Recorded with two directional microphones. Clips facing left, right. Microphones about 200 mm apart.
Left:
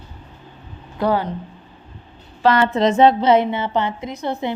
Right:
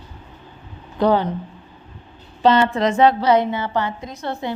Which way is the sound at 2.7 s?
20° left (ahead or behind).